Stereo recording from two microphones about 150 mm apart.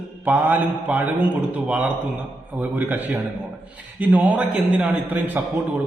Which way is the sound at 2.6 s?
10° right (ahead or behind).